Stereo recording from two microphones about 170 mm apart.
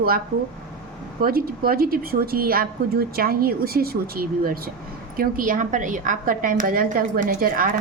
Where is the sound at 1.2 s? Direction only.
60° right (ahead or behind).